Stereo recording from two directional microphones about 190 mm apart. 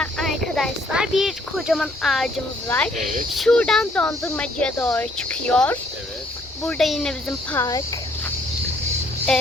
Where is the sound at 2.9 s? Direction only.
40° right (ahead or behind).